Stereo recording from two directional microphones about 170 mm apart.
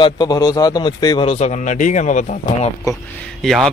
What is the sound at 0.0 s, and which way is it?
A man's voice, 25° left (ahead or behind).